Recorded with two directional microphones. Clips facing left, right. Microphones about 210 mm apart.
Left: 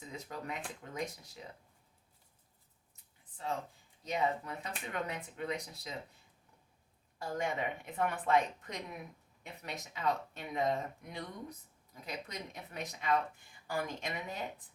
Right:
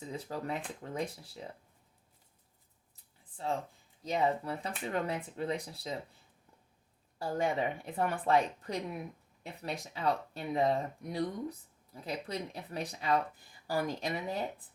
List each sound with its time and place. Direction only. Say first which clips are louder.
0.1 s speech: right 5 dB; 35° right (ahead or behind)
2.9 s a sound: right 6 dB; 35° right (ahead or behind)
4.0 s speech: right 3 dB; 35° right (ahead or behind)
7.2 s speech: right 4 dB; 35° right (ahead or behind)